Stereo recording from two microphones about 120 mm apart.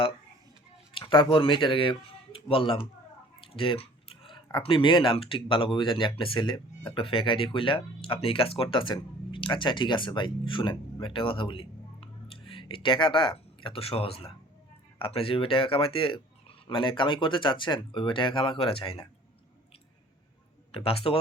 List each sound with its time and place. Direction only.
0.9 s speech: 45° left (ahead or behind)
3.4 s a sound: 45° left (ahead or behind)
4.5 s speech: 45° left (ahead or behind)
20.7 s speech: 50° left (ahead or behind)